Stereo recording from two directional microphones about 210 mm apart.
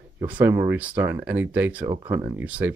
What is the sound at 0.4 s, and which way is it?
Speech, 10° right (ahead or behind).